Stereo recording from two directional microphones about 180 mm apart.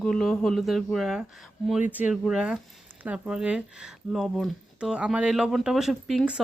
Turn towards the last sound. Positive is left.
turn(degrees=0)  # may be behind; listen again after turning